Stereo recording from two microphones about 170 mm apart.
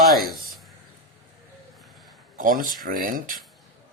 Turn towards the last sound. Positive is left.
turn(degrees=-55)  # may be behind; listen again after turning